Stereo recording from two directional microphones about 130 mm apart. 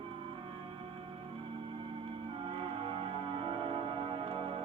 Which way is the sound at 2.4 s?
40° right (ahead or behind).